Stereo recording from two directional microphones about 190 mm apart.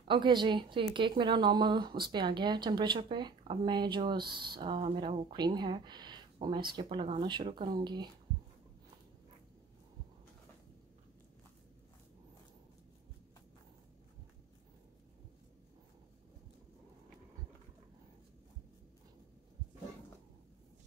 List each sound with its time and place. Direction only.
0.1 s speech: 25° right (ahead or behind)